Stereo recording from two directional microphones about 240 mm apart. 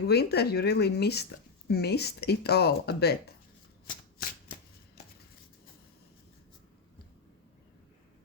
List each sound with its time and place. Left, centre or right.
0.1 s speech: left
3.8 s shuffling cards: left